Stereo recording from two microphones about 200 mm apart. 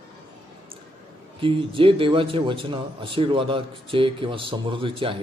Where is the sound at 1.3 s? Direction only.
25° right (ahead or behind).